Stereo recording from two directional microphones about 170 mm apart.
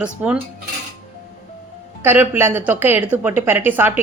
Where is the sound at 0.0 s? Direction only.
10° right (ahead or behind).